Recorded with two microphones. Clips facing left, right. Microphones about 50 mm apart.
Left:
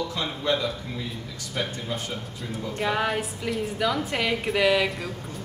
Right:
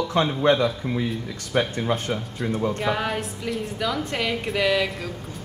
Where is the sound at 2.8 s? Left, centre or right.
Centre.